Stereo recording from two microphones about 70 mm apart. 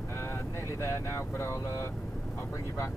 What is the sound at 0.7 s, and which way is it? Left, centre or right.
Speech, left.